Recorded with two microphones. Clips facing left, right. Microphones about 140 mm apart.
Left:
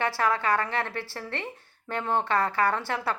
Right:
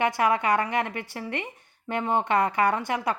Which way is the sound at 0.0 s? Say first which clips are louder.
Right 3 dB; 15° right (ahead or behind).